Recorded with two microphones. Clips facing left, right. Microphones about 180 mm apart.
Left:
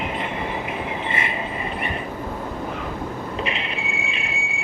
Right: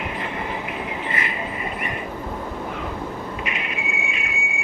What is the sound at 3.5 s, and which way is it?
Train, 30° left (ahead or behind).